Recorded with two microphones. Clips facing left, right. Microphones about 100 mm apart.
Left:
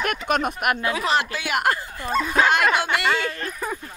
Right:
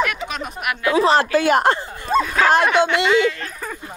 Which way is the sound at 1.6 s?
30° right (ahead or behind).